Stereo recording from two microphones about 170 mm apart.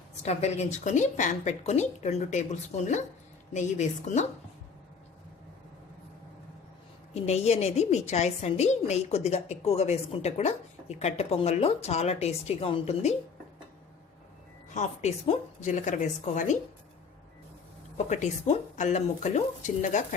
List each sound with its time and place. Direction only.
0.2 s speech: 40° left (ahead or behind)
7.1 s a woman's voice: 40° left (ahead or behind)
14.7 s speech: 45° left (ahead or behind)
17.9 s speech: 40° left (ahead or behind)